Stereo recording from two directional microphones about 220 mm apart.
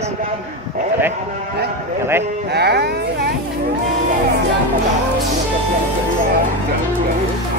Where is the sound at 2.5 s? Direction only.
50° right (ahead or behind).